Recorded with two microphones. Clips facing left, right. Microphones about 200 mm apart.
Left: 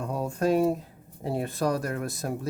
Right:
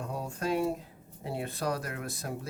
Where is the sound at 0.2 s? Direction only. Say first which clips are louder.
Left 7 dB; 45° left (ahead or behind).